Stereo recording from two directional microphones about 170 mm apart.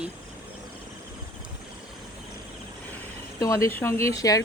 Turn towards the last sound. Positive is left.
turn(degrees=20)  # may be behind; listen again after turning